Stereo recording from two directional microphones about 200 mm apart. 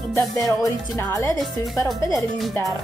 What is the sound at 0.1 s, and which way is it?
Music, 15° left (ahead or behind).